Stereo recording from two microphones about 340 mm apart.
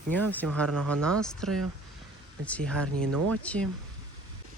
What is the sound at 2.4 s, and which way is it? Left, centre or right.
Speech, centre.